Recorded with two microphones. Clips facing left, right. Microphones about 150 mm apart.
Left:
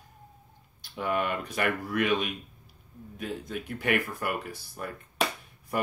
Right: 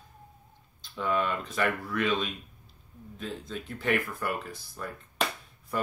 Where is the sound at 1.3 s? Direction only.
15° left (ahead or behind).